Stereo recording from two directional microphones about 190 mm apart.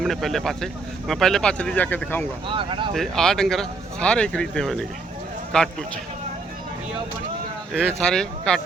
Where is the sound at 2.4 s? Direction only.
25° right (ahead or behind).